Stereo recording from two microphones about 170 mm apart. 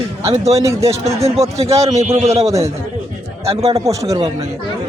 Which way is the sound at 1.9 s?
40° right (ahead or behind).